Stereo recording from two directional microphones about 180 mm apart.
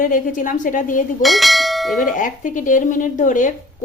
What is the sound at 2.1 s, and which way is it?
A woman's voice, 45° left (ahead or behind).